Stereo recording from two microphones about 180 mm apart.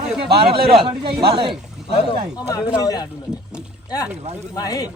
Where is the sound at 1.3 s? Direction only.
25° right (ahead or behind).